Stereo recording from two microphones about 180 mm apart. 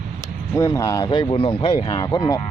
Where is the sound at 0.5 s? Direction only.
15° left (ahead or behind).